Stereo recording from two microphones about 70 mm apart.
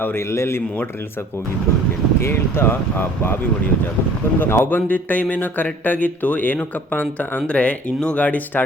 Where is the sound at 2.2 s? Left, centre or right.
Left.